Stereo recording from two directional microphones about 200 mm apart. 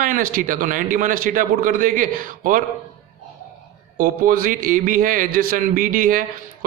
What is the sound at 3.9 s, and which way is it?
Speech, 45° right (ahead or behind).